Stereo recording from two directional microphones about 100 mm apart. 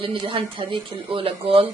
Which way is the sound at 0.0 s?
60° right (ahead or behind).